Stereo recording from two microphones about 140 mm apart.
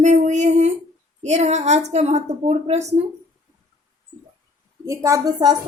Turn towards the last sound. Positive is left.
turn(degrees=-30)  # may be behind; listen again after turning